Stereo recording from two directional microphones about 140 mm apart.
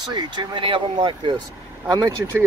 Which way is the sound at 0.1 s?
30° right (ahead or behind).